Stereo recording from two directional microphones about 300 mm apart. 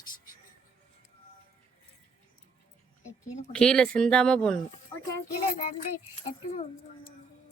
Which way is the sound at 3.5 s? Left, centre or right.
Centre.